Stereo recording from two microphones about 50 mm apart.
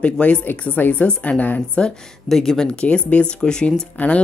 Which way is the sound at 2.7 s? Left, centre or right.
Left.